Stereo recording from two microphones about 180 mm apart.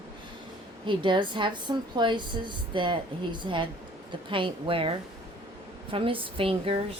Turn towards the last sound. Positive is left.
turn(degrees=-30)  # may be behind; listen again after turning